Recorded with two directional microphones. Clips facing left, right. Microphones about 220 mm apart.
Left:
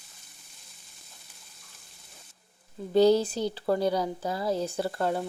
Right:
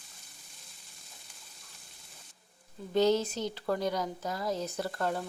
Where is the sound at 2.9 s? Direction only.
35° left (ahead or behind).